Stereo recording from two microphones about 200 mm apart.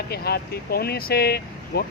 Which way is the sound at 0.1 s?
50° left (ahead or behind).